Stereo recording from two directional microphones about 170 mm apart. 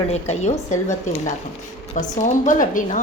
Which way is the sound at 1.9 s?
50° left (ahead or behind).